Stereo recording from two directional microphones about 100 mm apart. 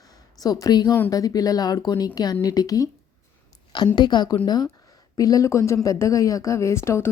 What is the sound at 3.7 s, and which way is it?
A woman's voice, 45° left (ahead or behind).